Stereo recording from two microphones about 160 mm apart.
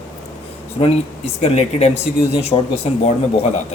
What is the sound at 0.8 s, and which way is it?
Speech, 40° left (ahead or behind).